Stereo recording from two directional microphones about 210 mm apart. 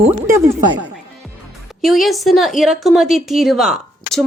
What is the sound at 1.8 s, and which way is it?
A woman's voice, centre (ahead or behind).